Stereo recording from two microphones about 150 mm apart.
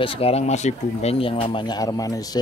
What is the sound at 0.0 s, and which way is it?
Speech, 40° left (ahead or behind).